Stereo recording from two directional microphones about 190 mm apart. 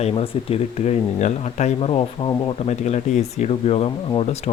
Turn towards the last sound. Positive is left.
turn(degrees=35)  # may be behind; listen again after turning